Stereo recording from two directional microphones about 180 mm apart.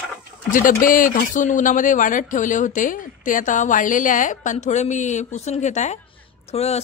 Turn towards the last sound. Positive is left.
turn(degrees=35)  # may be behind; listen again after turning